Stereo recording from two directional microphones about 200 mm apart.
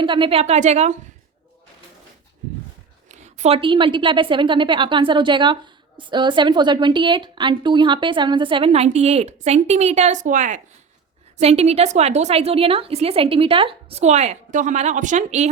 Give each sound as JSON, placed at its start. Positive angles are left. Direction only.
{"t": 0.0, "sound": "a woman's voice", "side_deg": -25}
{"t": 3.1, "sound": "a woman's voice", "side_deg": -35}